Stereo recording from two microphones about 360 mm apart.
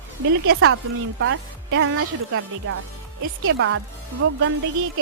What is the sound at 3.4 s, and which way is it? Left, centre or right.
Speech, right.